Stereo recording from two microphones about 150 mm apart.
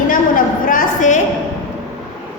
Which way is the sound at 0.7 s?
55° left (ahead or behind).